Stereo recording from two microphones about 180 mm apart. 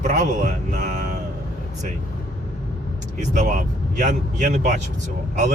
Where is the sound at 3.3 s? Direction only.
45° right (ahead or behind).